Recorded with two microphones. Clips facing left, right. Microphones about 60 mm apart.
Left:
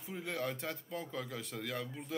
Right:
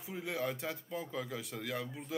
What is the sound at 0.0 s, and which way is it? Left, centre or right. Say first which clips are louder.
A man's voice: right 1 dB; centre.